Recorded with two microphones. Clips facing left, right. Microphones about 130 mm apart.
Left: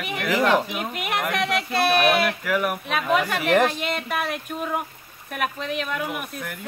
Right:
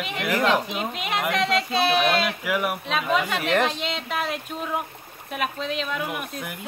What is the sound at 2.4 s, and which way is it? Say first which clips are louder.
Speech: left 1 dB; 5° right (ahead or behind).